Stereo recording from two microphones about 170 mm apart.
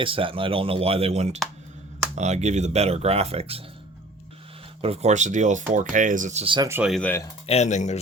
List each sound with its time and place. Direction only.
0.0 s speech: 30° right (ahead or behind)
4.8 s speech: 40° right (ahead or behind)
6.4 s speech: 30° right (ahead or behind)
6.7 s speech: 10° right (ahead or behind)
6.9 s speech: 10° left (ahead or behind)
7.4 s speech: 40° left (ahead or behind)